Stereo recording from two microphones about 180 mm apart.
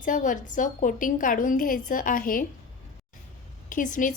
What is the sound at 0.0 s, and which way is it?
A woman's voice, 45° left (ahead or behind).